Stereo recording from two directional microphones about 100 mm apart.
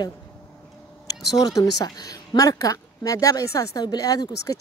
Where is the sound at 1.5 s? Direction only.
40° left (ahead or behind).